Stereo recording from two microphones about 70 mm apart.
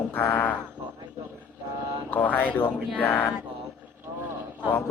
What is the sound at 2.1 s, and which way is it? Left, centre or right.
Speech, left.